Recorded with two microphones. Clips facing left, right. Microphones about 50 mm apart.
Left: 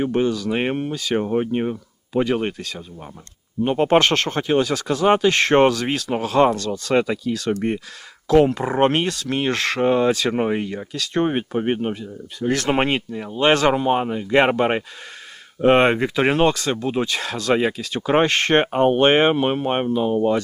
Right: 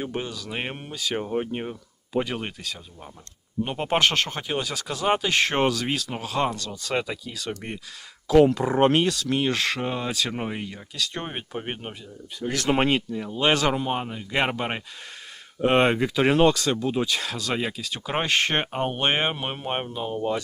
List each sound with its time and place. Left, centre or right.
0.0 s speech: centre
0.5 s speech: centre
0.9 s speech: centre
1.2 s speech: centre
3.6 s speech: centre
3.8 s speech: centre
8.4 s speech: centre
9.5 s speech: centre
9.8 s speech: centre
10.9 s speech: centre
17.5 s speech: centre
18.3 s speech: centre
19.1 s speech: centre